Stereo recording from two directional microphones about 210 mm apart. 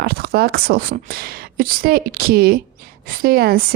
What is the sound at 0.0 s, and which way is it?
A woman's voice, 50° right (ahead or behind).